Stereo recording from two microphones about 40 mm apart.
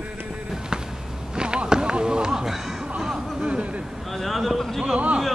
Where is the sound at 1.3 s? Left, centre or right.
Right.